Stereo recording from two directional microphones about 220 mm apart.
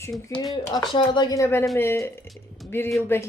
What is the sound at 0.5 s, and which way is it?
Speech, 20° left (ahead or behind).